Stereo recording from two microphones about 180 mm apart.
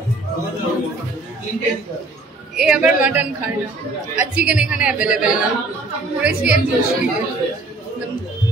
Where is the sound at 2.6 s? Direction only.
5° right (ahead or behind).